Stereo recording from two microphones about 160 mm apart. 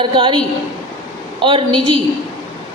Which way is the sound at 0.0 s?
30° right (ahead or behind).